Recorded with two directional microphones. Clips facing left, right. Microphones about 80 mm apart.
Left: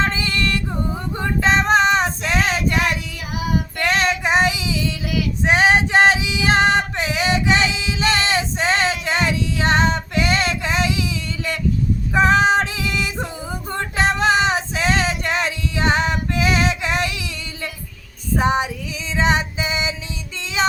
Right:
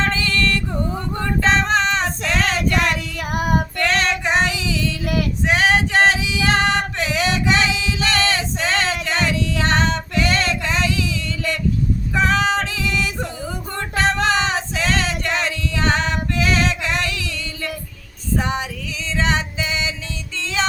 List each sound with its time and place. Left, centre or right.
0.0 s a sound: centre
1.1 s female singing: centre
3.2 s child singing: right
3.8 s female singing: centre
5.5 s male singing: left
12.1 s female singing: left
13.7 s a sound: centre
18.3 s female singing: left
20.4 s music: centre